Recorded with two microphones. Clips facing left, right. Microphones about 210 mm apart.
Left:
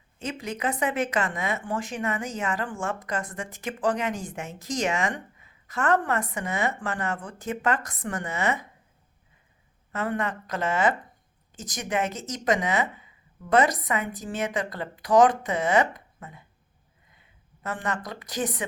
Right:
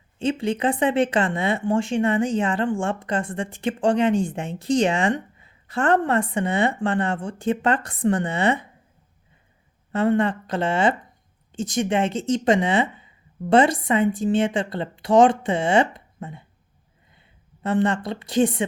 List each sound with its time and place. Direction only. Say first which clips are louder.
0.2 s speech: right 9 dB; 30° right (ahead or behind)
9.9 s a woman's voice: right 9 dB; 30° right (ahead or behind)